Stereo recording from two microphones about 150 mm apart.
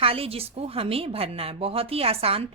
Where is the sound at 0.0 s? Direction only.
40° right (ahead or behind).